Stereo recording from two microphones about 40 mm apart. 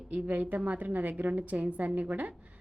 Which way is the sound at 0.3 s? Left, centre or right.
Right.